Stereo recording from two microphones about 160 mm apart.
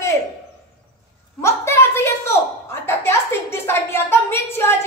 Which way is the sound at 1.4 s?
15° left (ahead or behind).